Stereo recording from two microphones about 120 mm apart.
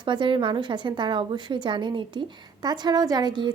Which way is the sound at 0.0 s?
40° right (ahead or behind).